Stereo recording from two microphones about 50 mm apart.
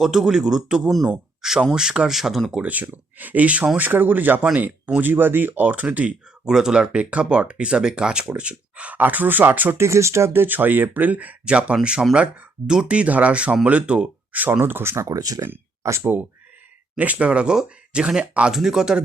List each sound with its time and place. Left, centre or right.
0.0 s speech: centre
2.6 s speech: right
6.4 s speech: centre
9.0 s speech: right
9.7 s speech: right
10.3 s speech: right
11.4 s speech: right
14.6 s speech: right
14.9 s speech: right
15.8 s speech: right
17.0 s speech: right; by 19.0 s centre